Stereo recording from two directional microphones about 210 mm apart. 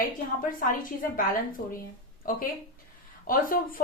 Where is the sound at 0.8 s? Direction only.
40° left (ahead or behind).